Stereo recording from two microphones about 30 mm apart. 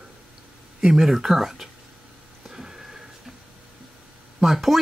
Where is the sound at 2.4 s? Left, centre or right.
Right.